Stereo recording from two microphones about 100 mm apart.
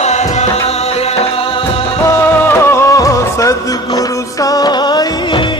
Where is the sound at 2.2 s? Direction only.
20° left (ahead or behind); by 5.4 s 50° left (ahead or behind).